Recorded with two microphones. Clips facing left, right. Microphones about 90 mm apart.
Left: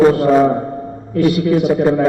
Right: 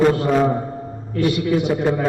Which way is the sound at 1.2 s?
Centre (ahead or behind).